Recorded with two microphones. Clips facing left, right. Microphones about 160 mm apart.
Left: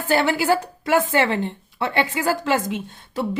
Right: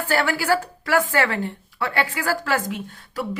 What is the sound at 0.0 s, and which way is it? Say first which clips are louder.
A woman's voice: left 3 dB; 20° left (ahead or behind).